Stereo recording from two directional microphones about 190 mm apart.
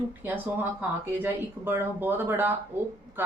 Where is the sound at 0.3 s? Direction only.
10° right (ahead or behind).